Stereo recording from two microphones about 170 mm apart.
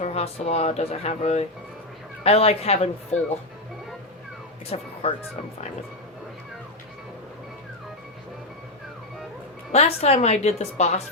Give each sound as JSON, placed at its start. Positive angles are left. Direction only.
{"t": 0.0, "sound": "speech", "side_deg": 40}
{"t": 4.7, "sound": "speech", "side_deg": 40}
{"t": 9.7, "sound": "speech", "side_deg": 35}